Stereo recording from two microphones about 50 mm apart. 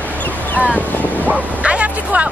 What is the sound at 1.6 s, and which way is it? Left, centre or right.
Speech, right.